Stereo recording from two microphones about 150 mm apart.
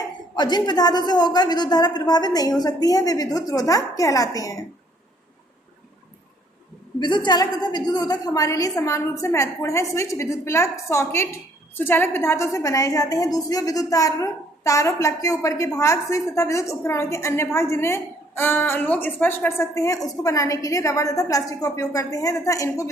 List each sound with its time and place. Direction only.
0.3 s a woman's voice: 30° left (ahead or behind)
7.0 s a woman's voice: 30° left (ahead or behind)